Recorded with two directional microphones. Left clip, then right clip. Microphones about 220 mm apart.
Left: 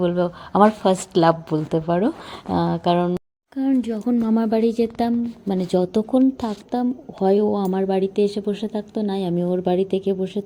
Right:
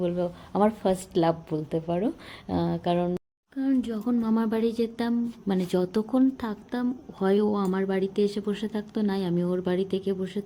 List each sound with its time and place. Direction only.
0.0 s a woman's voice: 15° left (ahead or behind)
7.4 s speech: 20° right (ahead or behind)
7.7 s a woman's voice: 5° left (ahead or behind)